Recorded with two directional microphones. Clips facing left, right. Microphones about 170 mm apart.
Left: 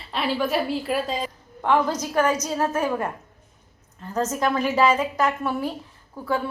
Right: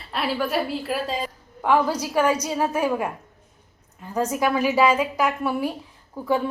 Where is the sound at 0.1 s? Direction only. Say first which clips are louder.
Left 1 dB; centre (ahead or behind).